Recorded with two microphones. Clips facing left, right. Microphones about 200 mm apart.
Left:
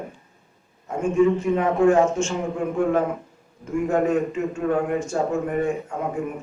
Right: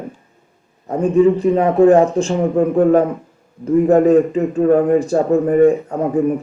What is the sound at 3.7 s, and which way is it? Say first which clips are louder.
A man's voice: right 10 dB; 35° right (ahead or behind).